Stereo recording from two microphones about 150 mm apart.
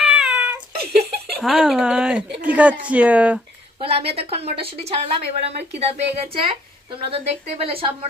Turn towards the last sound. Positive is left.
turn(degrees=-40)  # may be behind; listen again after turning